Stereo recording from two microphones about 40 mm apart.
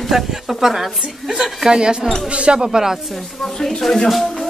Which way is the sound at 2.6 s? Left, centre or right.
Centre.